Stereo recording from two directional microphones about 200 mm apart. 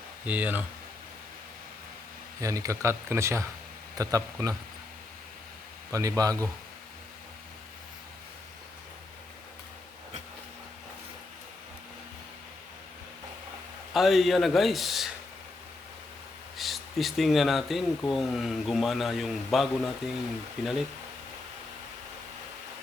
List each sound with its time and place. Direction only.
0.3 s speech: 10° right (ahead or behind)
2.4 s speech: 15° right (ahead or behind)
5.9 s speech: 15° right (ahead or behind)
13.9 s speech: centre (ahead or behind)
16.6 s speech: centre (ahead or behind)